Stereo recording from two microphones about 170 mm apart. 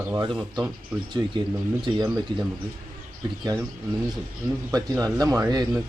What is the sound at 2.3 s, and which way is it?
Speech, 30° right (ahead or behind).